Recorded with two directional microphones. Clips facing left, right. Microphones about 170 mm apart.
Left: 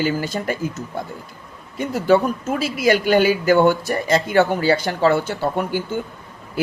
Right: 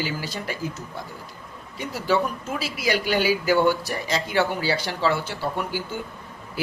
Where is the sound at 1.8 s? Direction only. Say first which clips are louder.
Left 7 dB; 50° left (ahead or behind).